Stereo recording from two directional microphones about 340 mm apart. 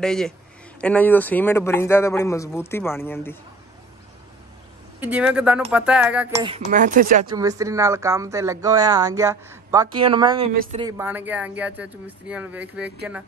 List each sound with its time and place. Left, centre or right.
0.0 s a man's voice: centre
5.0 s speech: centre
6.7 s speech: right
7.3 s speech: centre